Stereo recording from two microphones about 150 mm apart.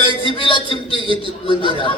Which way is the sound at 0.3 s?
35° left (ahead or behind).